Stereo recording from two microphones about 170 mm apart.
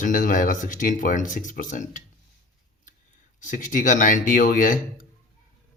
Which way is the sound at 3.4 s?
50° left (ahead or behind).